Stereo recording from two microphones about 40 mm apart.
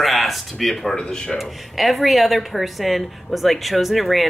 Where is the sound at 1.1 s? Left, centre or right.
Centre.